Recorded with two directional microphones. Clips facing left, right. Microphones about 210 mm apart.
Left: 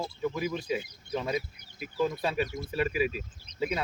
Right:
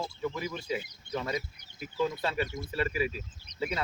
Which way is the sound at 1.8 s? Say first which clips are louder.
Left 2 dB; 15° left (ahead or behind).